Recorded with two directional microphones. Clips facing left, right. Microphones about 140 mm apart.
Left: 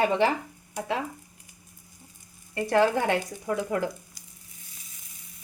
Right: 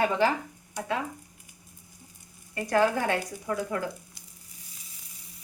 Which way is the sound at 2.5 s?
25° left (ahead or behind).